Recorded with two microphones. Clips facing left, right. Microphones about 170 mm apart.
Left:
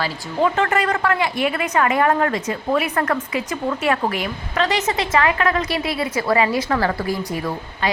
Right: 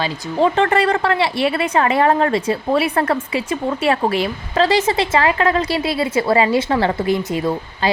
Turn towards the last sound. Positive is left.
turn(degrees=-25)  # may be behind; listen again after turning